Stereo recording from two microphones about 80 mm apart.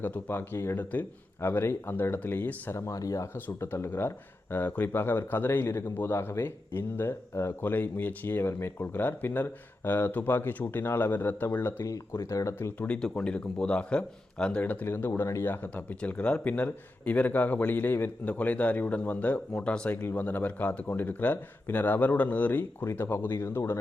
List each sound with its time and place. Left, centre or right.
0.0 s speech: left
2.8 s speech: left
3.3 s speech: left
12.5 s speech: left
12.9 s a man's voice: centre; by 23.8 s left